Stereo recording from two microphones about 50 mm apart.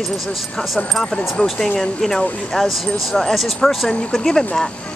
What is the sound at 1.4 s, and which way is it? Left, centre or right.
Speech, centre.